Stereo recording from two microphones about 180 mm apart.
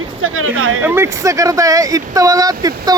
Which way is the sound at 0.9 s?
15° right (ahead or behind).